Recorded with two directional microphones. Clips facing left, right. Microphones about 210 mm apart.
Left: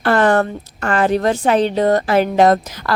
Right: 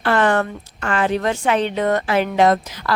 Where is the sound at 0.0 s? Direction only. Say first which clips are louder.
Left 3 dB; 40° left (ahead or behind).